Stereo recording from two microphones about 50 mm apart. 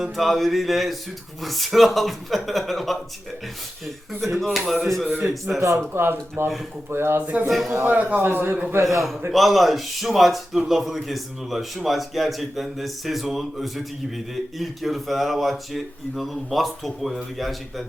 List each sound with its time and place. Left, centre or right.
0.0 s a man's voice: centre
4.2 s a man's voice: centre
5.0 s speech: right
5.5 s a man's voice: right
5.9 s speech: right
7.2 s speech: right
8.2 s speech: right
8.8 s a man's voice: right
9.3 s a man's voice: centre